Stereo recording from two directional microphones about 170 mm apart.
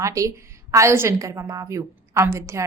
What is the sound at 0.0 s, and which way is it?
A woman's voice, 20° right (ahead or behind).